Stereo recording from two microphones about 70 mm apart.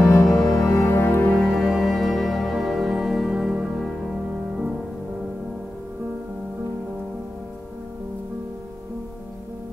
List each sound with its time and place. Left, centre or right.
0.0 s music: left
1.3 s music: centre